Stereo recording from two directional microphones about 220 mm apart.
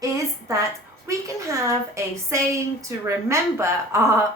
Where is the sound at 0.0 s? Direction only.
15° right (ahead or behind).